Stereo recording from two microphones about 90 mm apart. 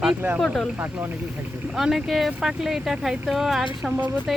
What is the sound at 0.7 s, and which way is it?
Speech, 20° right (ahead or behind).